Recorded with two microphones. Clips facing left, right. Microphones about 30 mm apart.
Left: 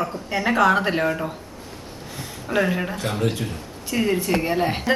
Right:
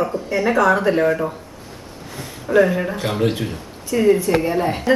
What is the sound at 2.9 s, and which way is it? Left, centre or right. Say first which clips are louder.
Speech: right 4 dB; centre.